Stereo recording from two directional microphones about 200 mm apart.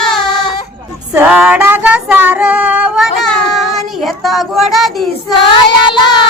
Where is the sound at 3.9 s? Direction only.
Centre (ahead or behind).